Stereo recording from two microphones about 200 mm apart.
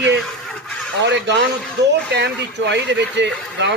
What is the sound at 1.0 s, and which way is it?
Speech, 60° right (ahead or behind).